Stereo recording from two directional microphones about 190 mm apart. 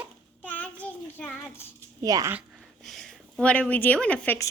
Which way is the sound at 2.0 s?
15° right (ahead or behind).